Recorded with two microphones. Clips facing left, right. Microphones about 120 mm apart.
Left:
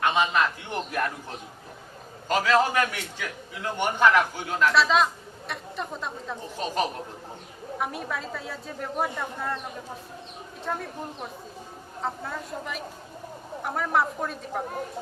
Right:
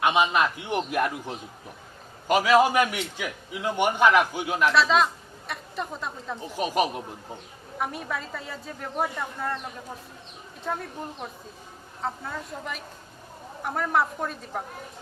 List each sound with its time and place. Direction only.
0.0 s a man's voice: 15° right (ahead or behind)
2.2 s a man's voice: 15° right (ahead or behind)
4.7 s a woman's voice: centre (ahead or behind)
6.6 s a man's voice: 10° right (ahead or behind)
7.8 s a woman's voice: centre (ahead or behind)
10.6 s a woman's voice: centre (ahead or behind)